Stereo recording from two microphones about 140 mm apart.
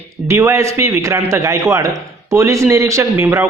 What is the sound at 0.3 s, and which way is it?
A man's voice, 20° right (ahead or behind).